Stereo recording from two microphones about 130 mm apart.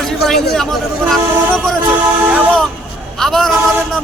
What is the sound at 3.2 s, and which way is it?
Speech, centre (ahead or behind).